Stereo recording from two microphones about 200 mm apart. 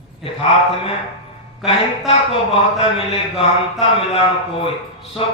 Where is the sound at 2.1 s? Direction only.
30° left (ahead or behind).